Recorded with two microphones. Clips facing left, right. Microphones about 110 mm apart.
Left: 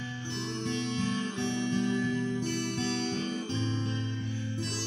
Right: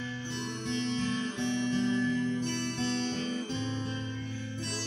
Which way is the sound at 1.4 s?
20° left (ahead or behind).